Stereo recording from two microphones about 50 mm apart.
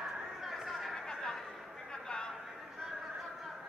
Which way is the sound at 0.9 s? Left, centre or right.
Centre.